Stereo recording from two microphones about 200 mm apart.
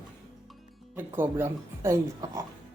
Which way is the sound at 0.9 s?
10° right (ahead or behind).